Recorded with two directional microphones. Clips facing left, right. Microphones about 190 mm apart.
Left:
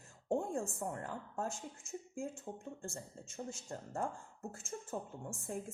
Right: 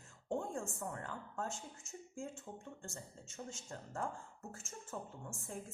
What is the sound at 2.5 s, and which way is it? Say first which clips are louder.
Speech: left 4 dB; 35° left (ahead or behind).